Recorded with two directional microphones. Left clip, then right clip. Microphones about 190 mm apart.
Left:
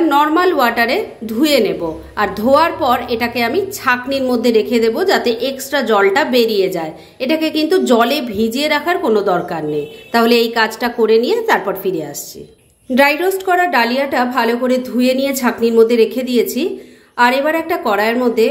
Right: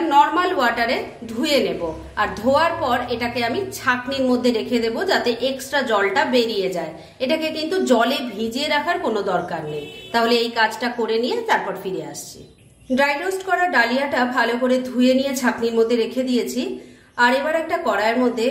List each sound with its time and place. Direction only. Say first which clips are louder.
0.1 s a woman's voice: left 3 dB; 35° left (ahead or behind)
12.9 s a woman's voice: left 7 dB; 45° left (ahead or behind)